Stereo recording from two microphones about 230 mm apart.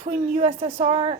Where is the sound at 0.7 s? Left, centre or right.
Right.